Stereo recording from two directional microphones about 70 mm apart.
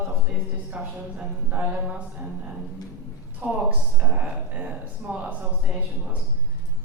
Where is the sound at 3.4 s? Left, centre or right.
Centre.